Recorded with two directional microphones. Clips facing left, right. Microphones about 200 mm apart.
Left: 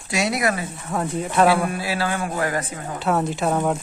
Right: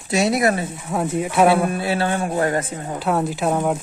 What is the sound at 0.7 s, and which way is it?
Speech, 5° right (ahead or behind).